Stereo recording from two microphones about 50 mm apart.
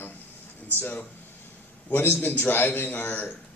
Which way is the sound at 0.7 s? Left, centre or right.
Left.